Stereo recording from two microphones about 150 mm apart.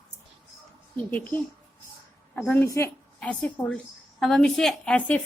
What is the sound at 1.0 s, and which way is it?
A woman's voice, 10° left (ahead or behind).